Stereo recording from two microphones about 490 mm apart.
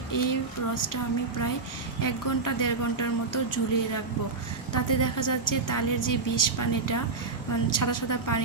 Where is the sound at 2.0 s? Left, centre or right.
Left.